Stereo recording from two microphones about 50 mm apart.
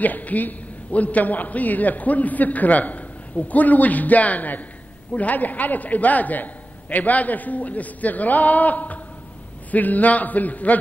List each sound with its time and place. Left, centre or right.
0.0 s a man's voice: left